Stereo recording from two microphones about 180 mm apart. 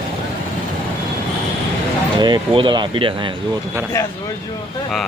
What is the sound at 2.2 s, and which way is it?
Speech, 25° right (ahead or behind).